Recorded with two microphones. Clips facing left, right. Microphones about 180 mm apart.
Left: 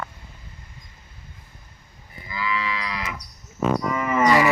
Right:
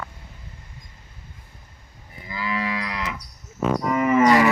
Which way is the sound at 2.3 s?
45° right (ahead or behind).